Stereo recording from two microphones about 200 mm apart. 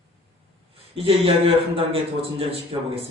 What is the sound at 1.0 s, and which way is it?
A man's voice, 30° right (ahead or behind).